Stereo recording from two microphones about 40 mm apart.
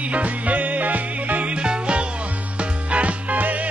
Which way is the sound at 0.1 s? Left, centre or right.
Right.